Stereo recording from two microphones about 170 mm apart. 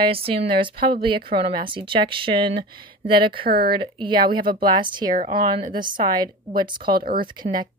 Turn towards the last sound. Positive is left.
turn(degrees=-25)  # may be behind; listen again after turning